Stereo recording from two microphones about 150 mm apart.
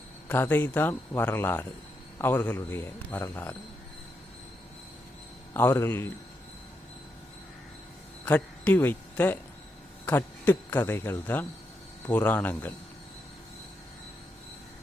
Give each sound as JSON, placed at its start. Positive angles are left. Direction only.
{"t": 0.3, "sound": "speech", "side_deg": 15}
{"t": 5.5, "sound": "speech", "side_deg": 15}
{"t": 8.2, "sound": "speech", "side_deg": 10}